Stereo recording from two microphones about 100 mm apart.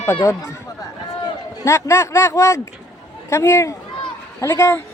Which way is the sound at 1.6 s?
30° left (ahead or behind).